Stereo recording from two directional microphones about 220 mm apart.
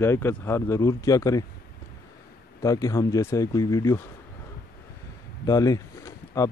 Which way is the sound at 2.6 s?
15° left (ahead or behind).